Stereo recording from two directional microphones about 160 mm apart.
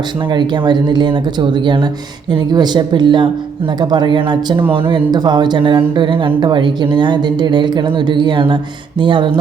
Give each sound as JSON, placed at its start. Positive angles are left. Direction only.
{"t": 0.3, "sound": "a woman's voice", "side_deg": -30}